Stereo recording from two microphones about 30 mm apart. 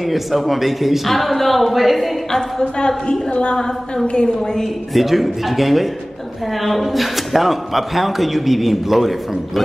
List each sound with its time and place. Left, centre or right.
0.0 s a man's voice: centre
3.5 s a woman's voice: left
4.4 s a woman's voice: centre
4.9 s a man's voice: centre